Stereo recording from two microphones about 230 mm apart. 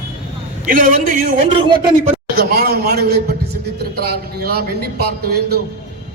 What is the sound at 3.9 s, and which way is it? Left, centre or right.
A man's voice, right.